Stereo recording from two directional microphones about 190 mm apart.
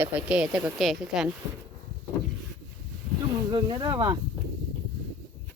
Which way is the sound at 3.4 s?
20° right (ahead or behind).